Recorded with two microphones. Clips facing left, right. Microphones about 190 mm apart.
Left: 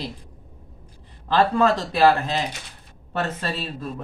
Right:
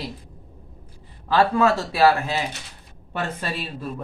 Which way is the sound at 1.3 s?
5° right (ahead or behind).